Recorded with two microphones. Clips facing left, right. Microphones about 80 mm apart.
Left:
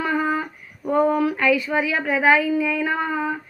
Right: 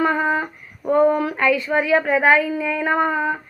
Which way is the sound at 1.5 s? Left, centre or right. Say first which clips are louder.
Right 4 dB; centre.